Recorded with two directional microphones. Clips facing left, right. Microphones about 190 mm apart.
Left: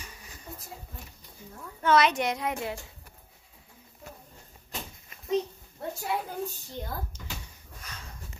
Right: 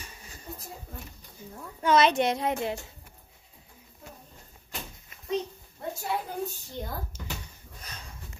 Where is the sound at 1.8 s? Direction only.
25° right (ahead or behind).